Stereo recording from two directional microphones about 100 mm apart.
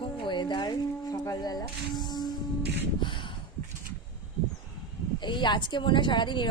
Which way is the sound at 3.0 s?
55° left (ahead or behind).